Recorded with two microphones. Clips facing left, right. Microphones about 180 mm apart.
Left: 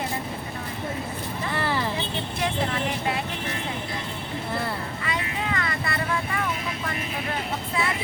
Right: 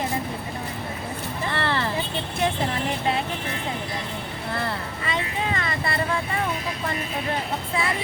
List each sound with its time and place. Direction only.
1.5 s music: 10° left (ahead or behind)
5.0 s vehicle: 25° right (ahead or behind)